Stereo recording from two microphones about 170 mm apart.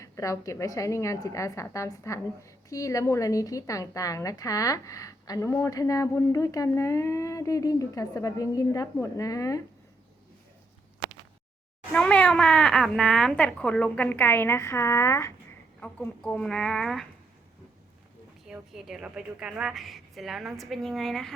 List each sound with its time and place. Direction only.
0.0 s a woman's voice: 20° left (ahead or behind)
11.9 s a woman's voice: 5° left (ahead or behind)
18.4 s a woman's voice: 5° right (ahead or behind)